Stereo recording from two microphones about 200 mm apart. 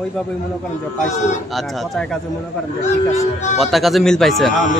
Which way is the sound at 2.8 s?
35° left (ahead or behind).